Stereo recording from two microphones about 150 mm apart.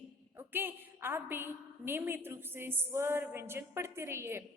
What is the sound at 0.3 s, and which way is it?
A woman's voice, 15° right (ahead or behind).